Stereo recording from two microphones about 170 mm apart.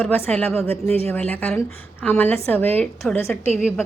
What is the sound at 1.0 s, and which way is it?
A woman's voice, 10° left (ahead or behind).